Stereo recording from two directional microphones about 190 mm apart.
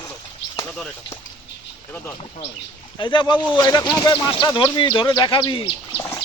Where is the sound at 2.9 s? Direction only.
25° left (ahead or behind).